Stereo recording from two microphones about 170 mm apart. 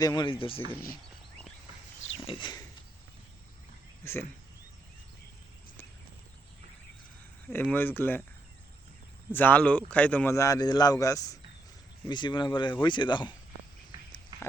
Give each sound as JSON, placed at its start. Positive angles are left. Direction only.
{"t": 0.0, "sound": "speech", "side_deg": 20}
{"t": 2.2, "sound": "speech", "side_deg": 25}
{"t": 4.0, "sound": "speech", "side_deg": 15}
{"t": 7.5, "sound": "speech", "side_deg": 10}
{"t": 9.3, "sound": "speech", "side_deg": 10}
{"t": 14.3, "sound": "a sound", "side_deg": -25}